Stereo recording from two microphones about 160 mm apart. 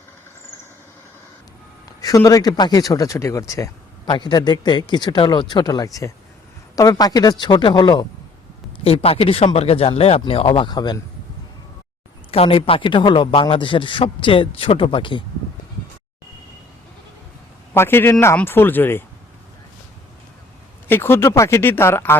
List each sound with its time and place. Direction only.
2.0 s a man's voice: 20° left (ahead or behind)
12.3 s a man's voice: 35° left (ahead or behind)
17.7 s speech: 15° left (ahead or behind)
20.8 s speech: 15° left (ahead or behind)